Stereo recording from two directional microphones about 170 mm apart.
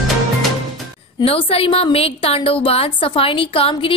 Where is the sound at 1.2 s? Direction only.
35° left (ahead or behind).